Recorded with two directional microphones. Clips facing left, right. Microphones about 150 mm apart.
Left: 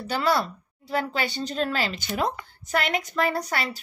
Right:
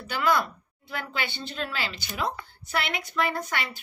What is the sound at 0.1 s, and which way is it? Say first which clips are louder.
A woman's voice: left 1 dB; 35° left (ahead or behind).